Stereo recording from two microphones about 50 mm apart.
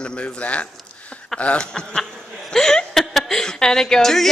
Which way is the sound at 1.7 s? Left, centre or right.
Centre.